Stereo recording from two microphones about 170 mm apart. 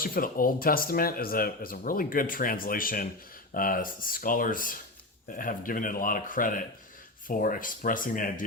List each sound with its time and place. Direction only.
0.0 s a man's voice: 60° left (ahead or behind)